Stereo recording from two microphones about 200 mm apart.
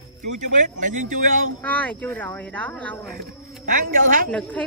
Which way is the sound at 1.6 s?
5° left (ahead or behind).